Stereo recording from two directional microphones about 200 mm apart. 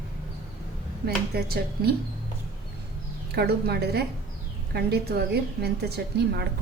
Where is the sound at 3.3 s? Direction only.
50° right (ahead or behind).